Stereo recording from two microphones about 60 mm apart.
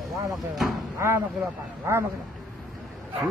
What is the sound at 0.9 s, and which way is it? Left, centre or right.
Speech, right.